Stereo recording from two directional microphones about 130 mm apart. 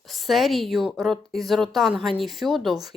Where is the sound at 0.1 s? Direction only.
Centre (ahead or behind).